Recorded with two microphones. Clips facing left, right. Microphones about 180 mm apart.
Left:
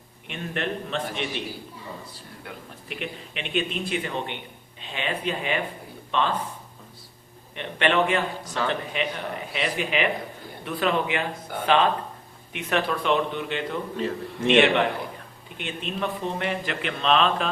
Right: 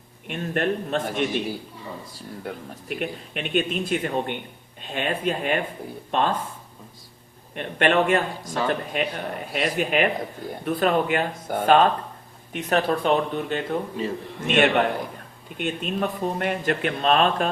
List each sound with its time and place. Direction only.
0.3 s speech: 45° right (ahead or behind)
2.4 s speech: 45° right (ahead or behind)
7.5 s speech: 50° right (ahead or behind)
8.4 s speech: 10° right (ahead or behind)
8.9 s speech: 45° right (ahead or behind)